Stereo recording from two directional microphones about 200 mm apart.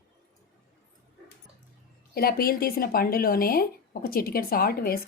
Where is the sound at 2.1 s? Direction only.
50° left (ahead or behind).